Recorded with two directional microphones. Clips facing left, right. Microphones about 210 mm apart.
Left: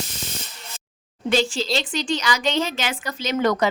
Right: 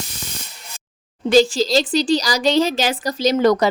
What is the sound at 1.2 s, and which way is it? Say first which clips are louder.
A woman's voice: right 7 dB; 40° right (ahead or behind).